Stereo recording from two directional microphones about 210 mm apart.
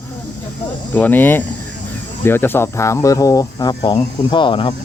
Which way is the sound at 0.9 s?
10° left (ahead or behind).